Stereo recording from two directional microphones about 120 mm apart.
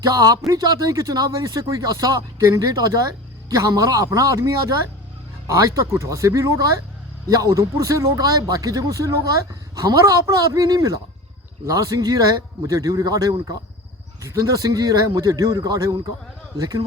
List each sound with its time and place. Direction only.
0.0 s a man's voice: 30° right (ahead or behind)